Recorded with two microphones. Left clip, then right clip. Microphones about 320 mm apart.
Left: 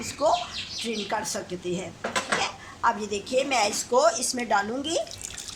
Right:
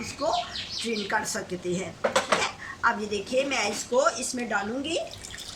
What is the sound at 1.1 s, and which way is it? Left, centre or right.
Speech, centre.